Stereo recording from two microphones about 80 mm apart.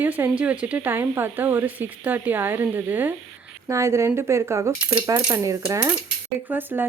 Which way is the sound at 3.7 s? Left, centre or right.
Right.